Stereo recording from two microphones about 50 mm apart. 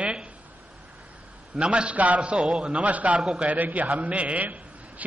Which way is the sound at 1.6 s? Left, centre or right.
Right.